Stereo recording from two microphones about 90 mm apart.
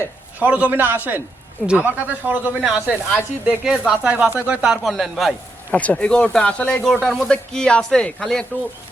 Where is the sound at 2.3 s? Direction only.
25° right (ahead or behind).